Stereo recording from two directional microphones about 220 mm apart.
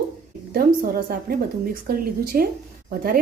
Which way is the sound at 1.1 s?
40° right (ahead or behind).